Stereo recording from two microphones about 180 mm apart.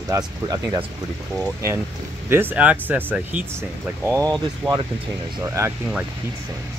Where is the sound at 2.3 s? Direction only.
10° right (ahead or behind).